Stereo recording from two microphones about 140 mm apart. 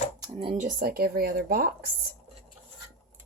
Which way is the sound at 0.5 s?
65° right (ahead or behind).